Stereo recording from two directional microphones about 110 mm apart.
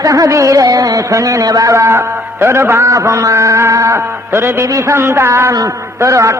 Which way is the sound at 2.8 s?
30° right (ahead or behind).